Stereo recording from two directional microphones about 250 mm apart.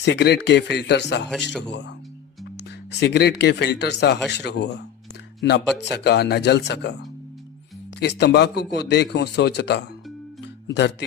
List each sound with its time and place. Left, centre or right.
0.0 s a man's voice: left